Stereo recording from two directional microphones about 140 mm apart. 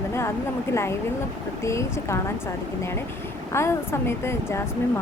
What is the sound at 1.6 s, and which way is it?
Speech, 20° left (ahead or behind).